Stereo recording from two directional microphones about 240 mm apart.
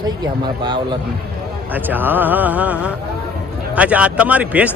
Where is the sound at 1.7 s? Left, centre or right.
Centre.